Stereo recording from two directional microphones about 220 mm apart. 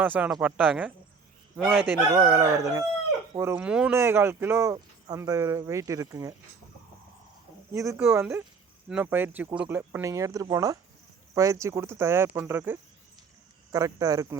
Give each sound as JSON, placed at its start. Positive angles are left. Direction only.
{"t": 0.0, "sound": "speech", "side_deg": -5}
{"t": 1.8, "sound": "speech", "side_deg": -10}
{"t": 7.7, "sound": "speech", "side_deg": -15}